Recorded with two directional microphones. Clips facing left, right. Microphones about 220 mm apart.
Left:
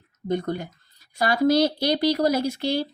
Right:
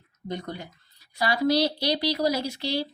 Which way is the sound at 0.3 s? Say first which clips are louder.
Left 8 dB; 50° left (ahead or behind).